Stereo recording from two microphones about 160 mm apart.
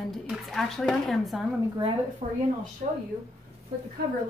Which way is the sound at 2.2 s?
40° right (ahead or behind).